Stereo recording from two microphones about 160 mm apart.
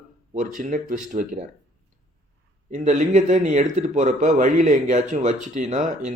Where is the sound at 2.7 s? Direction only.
50° right (ahead or behind).